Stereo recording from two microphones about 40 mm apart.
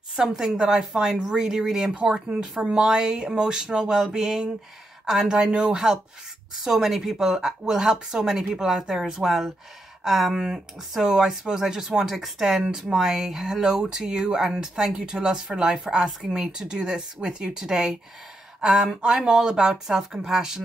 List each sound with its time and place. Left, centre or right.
0.2 s speech: centre